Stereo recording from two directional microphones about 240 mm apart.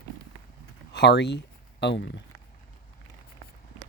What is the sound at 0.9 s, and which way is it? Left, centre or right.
Speech, left.